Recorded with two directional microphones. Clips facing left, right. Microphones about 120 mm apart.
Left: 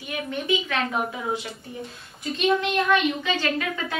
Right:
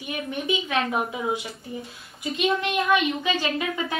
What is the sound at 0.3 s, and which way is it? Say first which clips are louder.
A woman's voice: even; 15° right (ahead or behind).